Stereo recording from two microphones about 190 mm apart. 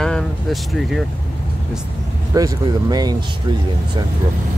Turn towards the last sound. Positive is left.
turn(degrees=-20)  # may be behind; listen again after turning